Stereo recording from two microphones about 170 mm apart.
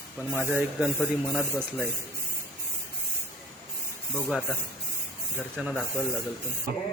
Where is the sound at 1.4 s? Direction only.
5° left (ahead or behind).